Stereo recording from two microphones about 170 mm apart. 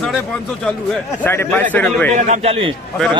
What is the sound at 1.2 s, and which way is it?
Speech, 10° left (ahead or behind).